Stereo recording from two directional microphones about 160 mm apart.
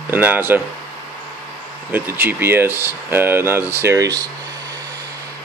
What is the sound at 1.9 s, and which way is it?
Speech, 15° right (ahead or behind).